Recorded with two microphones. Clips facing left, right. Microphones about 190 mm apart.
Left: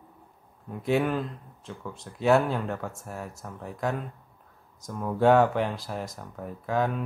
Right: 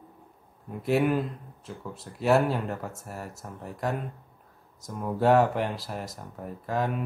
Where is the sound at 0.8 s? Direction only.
5° right (ahead or behind).